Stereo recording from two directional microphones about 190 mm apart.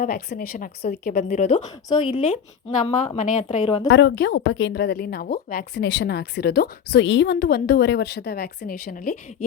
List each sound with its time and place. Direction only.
0.0 s a woman's voice: 50° left (ahead or behind); by 3.8 s 35° left (ahead or behind)
3.8 s a woman's voice: 65° left (ahead or behind); by 9.1 s 50° left (ahead or behind)